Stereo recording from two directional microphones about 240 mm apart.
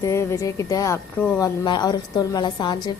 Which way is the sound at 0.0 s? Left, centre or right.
Centre.